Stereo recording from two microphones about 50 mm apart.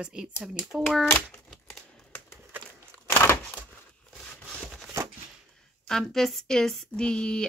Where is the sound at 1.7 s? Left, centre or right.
Left.